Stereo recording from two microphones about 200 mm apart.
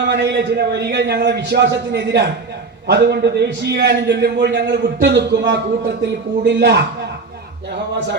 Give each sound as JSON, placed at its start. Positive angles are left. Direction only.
{"t": 0.0, "sound": "a man's voice", "side_deg": -60}